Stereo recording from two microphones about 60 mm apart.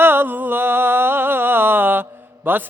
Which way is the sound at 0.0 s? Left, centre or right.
Right.